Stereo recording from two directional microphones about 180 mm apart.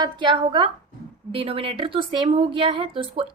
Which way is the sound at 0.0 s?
25° right (ahead or behind).